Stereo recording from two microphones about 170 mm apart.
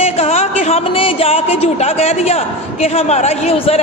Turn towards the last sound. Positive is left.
turn(degrees=40)  # may be behind; listen again after turning